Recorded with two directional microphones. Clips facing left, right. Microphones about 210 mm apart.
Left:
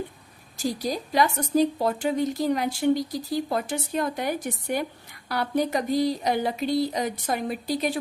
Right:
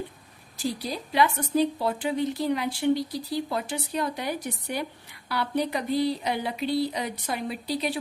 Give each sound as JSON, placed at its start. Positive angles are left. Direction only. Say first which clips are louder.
{"t": 0.6, "sound": "speech", "louder": "left 3 dB", "side_deg": 45}